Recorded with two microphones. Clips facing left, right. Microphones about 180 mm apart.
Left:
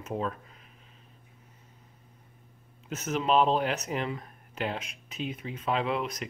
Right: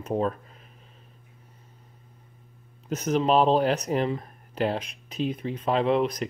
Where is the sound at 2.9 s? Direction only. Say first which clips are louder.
Right 5 dB; 35° right (ahead or behind).